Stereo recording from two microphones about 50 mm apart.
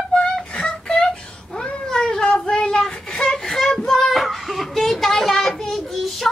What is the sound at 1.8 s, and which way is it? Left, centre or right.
Cat, centre.